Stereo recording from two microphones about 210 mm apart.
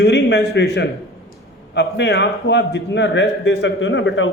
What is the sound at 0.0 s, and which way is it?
A man's voice, 55° left (ahead or behind).